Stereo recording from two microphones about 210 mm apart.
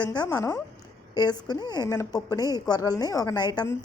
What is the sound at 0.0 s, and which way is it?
A woman's voice, 20° left (ahead or behind).